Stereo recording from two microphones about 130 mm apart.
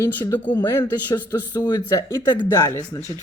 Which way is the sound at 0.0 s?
20° left (ahead or behind).